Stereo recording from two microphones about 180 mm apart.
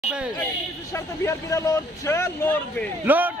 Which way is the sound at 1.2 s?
15° left (ahead or behind).